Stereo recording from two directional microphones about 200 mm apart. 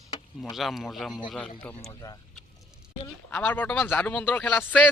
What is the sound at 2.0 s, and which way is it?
Speech, 20° left (ahead or behind).